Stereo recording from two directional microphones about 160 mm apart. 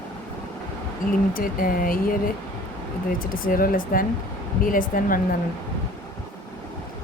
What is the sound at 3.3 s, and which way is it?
Speech, 60° left (ahead or behind).